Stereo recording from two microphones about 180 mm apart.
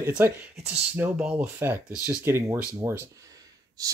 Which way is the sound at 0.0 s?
10° right (ahead or behind).